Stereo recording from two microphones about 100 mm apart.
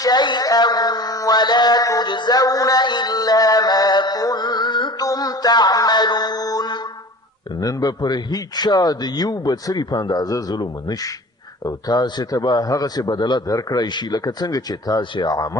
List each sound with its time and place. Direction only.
0.0 s speech: 45° left (ahead or behind)
2.0 s music: 50° left (ahead or behind)
7.6 s a man's voice: 40° left (ahead or behind)